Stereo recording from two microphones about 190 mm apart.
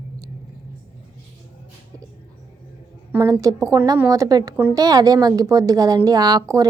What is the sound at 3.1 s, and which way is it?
A woman's voice, 15° right (ahead or behind).